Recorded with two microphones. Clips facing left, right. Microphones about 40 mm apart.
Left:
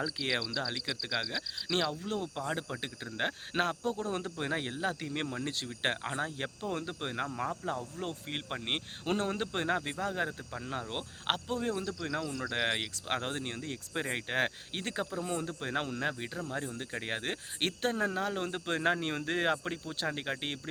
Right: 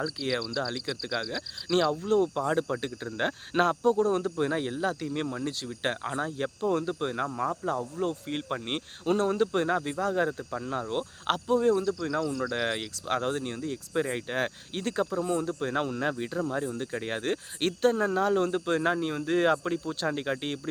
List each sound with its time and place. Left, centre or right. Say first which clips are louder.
0.2 s speech: right 2 dB; centre
0.4 s speech: right 4 dB; centre
4.1 s speech: right 7 dB; centre
8.0 s speech: right 7 dB; centre
11.9 s speech: right 7 dB; left
13.1 s speech: right 7 dB; centre
19.4 s speech: right 8 dB; centre